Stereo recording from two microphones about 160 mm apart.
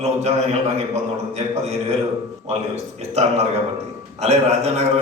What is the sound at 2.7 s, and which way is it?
A man's voice, 45° right (ahead or behind).